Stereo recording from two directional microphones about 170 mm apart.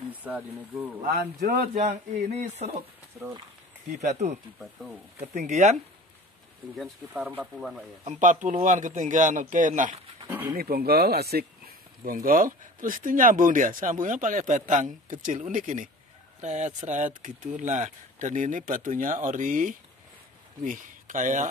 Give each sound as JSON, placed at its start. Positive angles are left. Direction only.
{"t": 0.1, "sound": "speech", "side_deg": -10}
{"t": 1.0, "sound": "speech", "side_deg": -55}
{"t": 3.9, "sound": "speech", "side_deg": -45}
{"t": 6.8, "sound": "speech", "side_deg": -10}
{"t": 8.0, "sound": "speech", "side_deg": -45}
{"t": 10.5, "sound": "speech", "side_deg": -60}
{"t": 12.1, "sound": "speech", "side_deg": -55}